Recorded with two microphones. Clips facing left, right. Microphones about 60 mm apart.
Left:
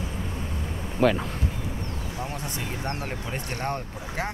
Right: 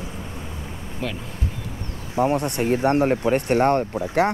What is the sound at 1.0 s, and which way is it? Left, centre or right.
Speech, left.